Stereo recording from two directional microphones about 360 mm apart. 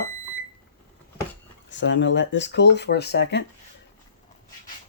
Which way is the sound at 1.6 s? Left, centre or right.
Left.